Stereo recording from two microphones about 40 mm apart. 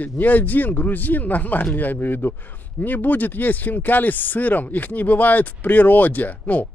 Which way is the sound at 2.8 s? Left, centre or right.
Left.